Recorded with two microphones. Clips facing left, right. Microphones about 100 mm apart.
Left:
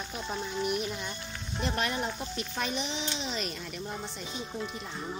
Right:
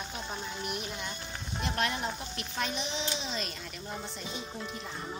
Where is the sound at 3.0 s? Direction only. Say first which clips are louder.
Left 1 dB; centre (ahead or behind).